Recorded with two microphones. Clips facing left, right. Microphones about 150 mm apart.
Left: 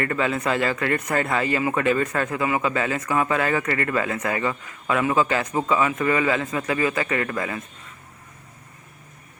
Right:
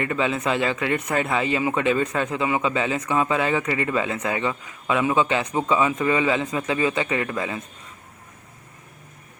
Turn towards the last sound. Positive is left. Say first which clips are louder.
# even
turn(degrees=-15)  # may be behind; listen again after turning